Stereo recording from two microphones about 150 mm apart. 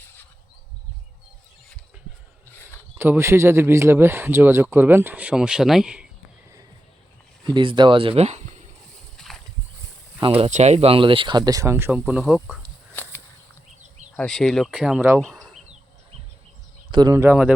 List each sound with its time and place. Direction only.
0.0 s insect: 15° left (ahead or behind)
3.0 s speech: 15° right (ahead or behind)
7.4 s speech: 30° right (ahead or behind)
9.1 s a sound: centre (ahead or behind)
10.2 s speech: 35° right (ahead or behind); by 12.2 s 10° right (ahead or behind)
12.9 s walk: 10° left (ahead or behind)
14.2 s speech: 5° left (ahead or behind)
16.9 s speech: 30° right (ahead or behind)
17.2 s speech: 10° right (ahead or behind)